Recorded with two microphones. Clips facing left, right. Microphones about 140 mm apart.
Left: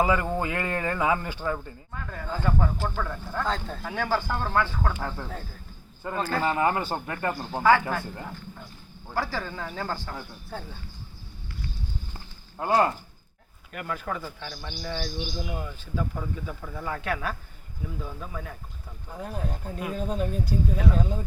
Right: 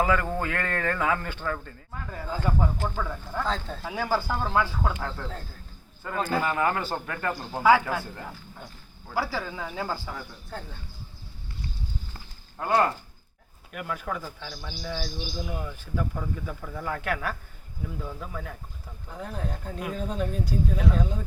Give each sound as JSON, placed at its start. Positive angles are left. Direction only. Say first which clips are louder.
{"t": 0.0, "sound": "speech", "louder": "left 1 dB", "side_deg": 15}
{"t": 1.9, "sound": "speech", "louder": "even", "side_deg": -10}
{"t": 4.9, "sound": "speech", "louder": "left 1 dB", "side_deg": 10}
{"t": 6.0, "sound": "speech", "louder": "even", "side_deg": 20}
{"t": 7.6, "sound": "speech", "louder": "right 1 dB", "side_deg": -5}
{"t": 12.1, "sound": "a sound", "louder": "left 2 dB", "side_deg": 20}
{"t": 13.7, "sound": "speech", "louder": "even", "side_deg": -5}